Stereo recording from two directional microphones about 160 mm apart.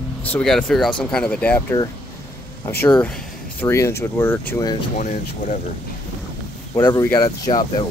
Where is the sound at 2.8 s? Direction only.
10° left (ahead or behind).